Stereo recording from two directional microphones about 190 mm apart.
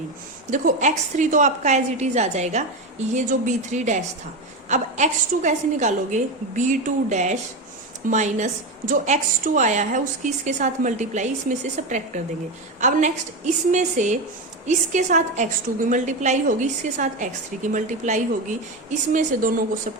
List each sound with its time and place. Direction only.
0.5 s a woman's voice: 40° right (ahead or behind)